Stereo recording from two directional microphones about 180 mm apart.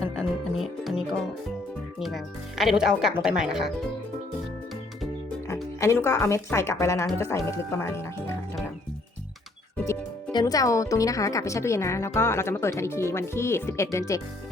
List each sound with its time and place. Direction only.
0.0 s music: centre (ahead or behind)
2.0 s speech: centre (ahead or behind)
5.8 s speech: 15° left (ahead or behind)
9.8 s speech: 15° left (ahead or behind)